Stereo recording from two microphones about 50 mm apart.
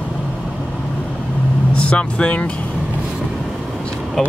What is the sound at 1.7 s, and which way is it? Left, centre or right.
Speech, left.